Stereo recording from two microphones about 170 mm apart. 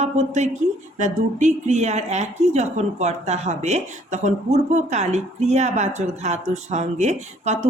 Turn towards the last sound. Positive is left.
turn(degrees=-45)  # may be behind; listen again after turning